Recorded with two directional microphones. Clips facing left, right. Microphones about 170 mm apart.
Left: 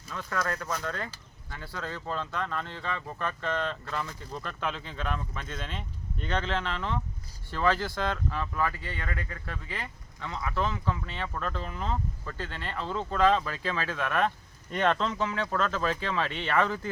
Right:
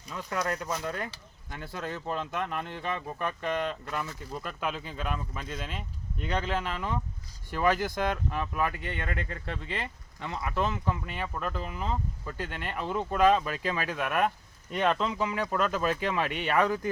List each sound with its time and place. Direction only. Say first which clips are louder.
0.1 s speech: right 1 dB; 15° right (ahead or behind)